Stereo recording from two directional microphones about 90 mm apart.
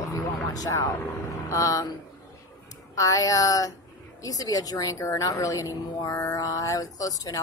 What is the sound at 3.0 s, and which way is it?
A woman's voice, 40° left (ahead or behind).